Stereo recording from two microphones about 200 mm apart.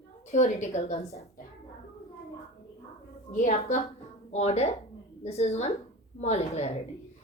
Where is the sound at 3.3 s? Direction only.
35° left (ahead or behind).